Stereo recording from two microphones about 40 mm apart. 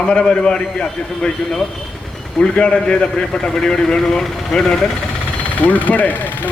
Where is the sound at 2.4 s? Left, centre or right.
Left.